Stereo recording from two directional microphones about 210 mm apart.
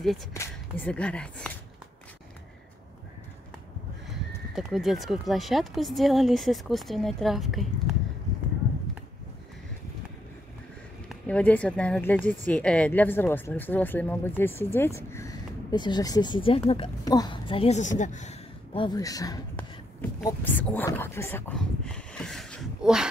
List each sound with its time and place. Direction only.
0.3 s speech: 10° left (ahead or behind)
4.6 s speech: centre (ahead or behind)
11.1 s speech: 5° left (ahead or behind)
19.5 s a sound: 5° left (ahead or behind)